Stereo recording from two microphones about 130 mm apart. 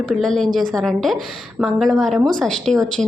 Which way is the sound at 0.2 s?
5° left (ahead or behind).